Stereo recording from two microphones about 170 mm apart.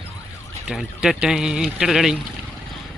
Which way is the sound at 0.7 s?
5° right (ahead or behind).